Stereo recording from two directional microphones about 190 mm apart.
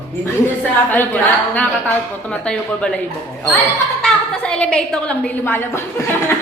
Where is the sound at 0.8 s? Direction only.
10° left (ahead or behind).